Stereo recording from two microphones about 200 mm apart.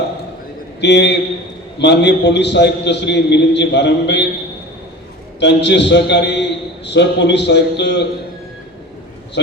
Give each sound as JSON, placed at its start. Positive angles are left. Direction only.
{"t": 0.8, "sound": "a man's voice", "side_deg": 60}
{"t": 5.4, "sound": "a man's voice", "side_deg": 60}